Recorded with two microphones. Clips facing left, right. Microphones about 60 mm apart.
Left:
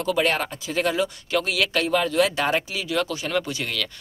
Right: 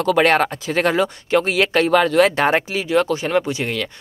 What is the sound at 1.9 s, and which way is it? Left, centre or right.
Speech, right.